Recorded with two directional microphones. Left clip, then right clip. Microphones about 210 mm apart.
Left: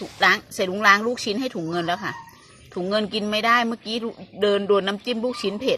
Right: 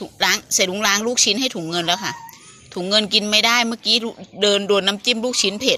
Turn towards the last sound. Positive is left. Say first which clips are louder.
# right 5 dB
turn(degrees=-10)  # may be behind; listen again after turning